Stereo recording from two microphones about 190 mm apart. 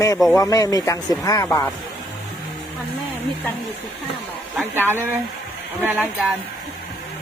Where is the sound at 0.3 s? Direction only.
20° left (ahead or behind).